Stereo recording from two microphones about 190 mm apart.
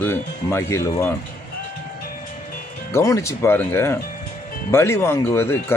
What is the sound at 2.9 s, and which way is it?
Speech, 15° left (ahead or behind).